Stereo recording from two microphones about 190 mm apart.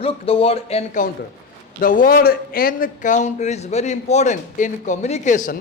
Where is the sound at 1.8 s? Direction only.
45° left (ahead or behind).